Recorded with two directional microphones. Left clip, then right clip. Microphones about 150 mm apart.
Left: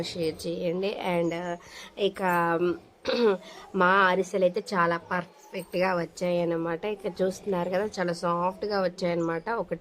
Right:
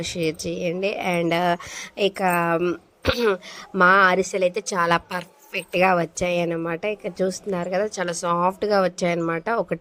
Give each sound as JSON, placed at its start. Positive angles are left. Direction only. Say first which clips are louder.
{"t": 0.0, "sound": "a woman's voice", "louder": "right 5 dB", "side_deg": -35}
{"t": 1.2, "sound": "speech", "louder": "right 9 dB", "side_deg": -55}
{"t": 2.0, "sound": "a woman's voice", "louder": "right 4 dB", "side_deg": -35}
{"t": 7.9, "sound": "a woman's voice", "louder": "right 4 dB", "side_deg": -40}